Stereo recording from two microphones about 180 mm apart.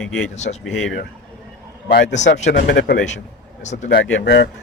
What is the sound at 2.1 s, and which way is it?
Speech, 40° left (ahead or behind).